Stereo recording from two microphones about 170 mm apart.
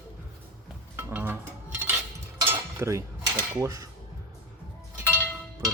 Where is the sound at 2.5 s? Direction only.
15° right (ahead or behind).